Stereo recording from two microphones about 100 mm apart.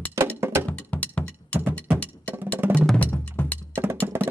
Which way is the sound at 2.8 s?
10° left (ahead or behind).